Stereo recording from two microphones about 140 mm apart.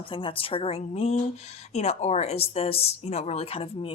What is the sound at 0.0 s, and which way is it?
Speech, 35° left (ahead or behind).